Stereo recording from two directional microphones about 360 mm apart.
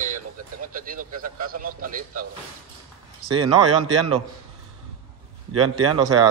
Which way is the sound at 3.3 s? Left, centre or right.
Centre.